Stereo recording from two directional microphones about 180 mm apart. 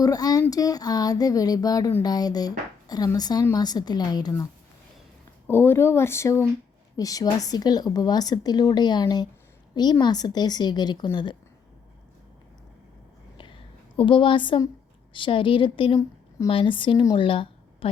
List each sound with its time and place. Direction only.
0.0 s speech: 20° left (ahead or behind)
5.5 s speech: 10° left (ahead or behind)
13.3 s a sound: 30° left (ahead or behind)
15.1 s a woman's voice: 30° left (ahead or behind)